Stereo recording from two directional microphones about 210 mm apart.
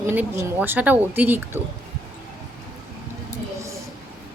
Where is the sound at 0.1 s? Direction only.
10° right (ahead or behind).